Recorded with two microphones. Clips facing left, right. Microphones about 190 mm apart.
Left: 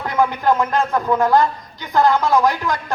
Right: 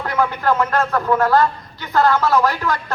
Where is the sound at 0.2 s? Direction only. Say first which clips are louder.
Left 2 dB; 15° left (ahead or behind).